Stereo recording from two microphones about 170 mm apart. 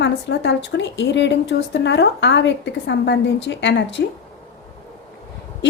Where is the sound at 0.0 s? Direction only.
90° left.